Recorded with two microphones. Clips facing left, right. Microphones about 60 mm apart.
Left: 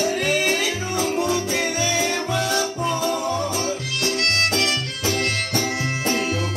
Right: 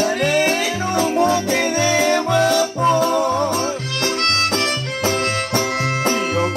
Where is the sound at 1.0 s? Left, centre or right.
Right.